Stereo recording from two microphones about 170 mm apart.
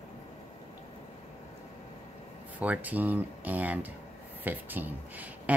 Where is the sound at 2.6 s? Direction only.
10° right (ahead or behind).